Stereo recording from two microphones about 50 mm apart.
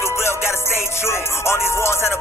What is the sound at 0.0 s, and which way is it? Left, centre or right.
Music, left.